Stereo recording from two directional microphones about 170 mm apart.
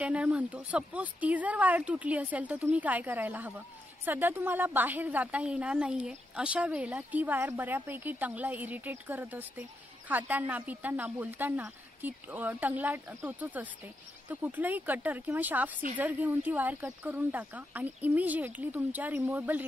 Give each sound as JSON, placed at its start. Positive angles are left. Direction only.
{"t": 0.0, "sound": "speech", "side_deg": -5}